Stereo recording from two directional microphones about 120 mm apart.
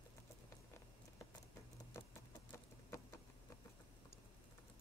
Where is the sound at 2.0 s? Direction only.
20° left (ahead or behind).